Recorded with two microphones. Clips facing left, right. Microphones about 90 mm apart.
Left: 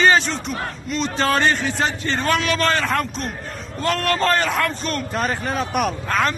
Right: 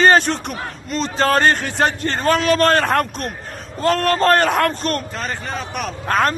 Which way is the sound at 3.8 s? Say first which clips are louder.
Right 4 dB; 40° right (ahead or behind).